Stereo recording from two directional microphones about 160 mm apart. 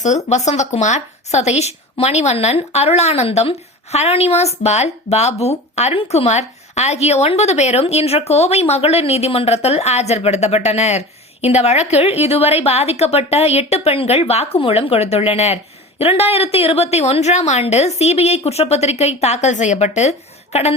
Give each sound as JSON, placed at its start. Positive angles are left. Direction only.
{"t": 0.3, "sound": "a woman's voice", "side_deg": 45}